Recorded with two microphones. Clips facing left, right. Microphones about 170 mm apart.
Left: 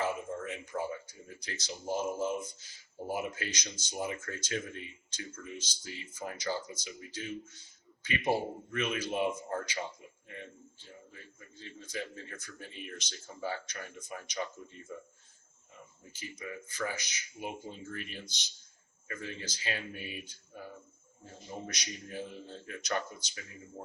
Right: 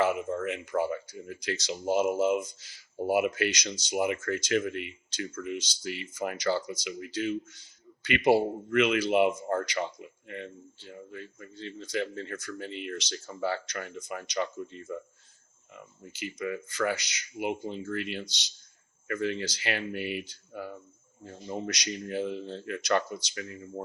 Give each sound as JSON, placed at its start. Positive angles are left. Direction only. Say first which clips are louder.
{"t": 0.0, "sound": "speech", "louder": "right 7 dB", "side_deg": -90}
{"t": 16.4, "sound": "speech", "louder": "right 8 dB", "side_deg": -80}
{"t": 21.7, "sound": "speech", "louder": "right 9 dB", "side_deg": -90}